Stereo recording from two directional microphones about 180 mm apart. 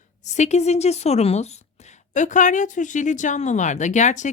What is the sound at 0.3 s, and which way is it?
A woman's voice, 40° left (ahead or behind).